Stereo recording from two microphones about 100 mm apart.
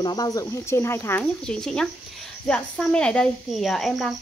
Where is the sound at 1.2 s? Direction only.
5° left (ahead or behind).